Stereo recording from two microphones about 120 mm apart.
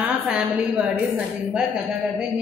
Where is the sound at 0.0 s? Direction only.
10° right (ahead or behind).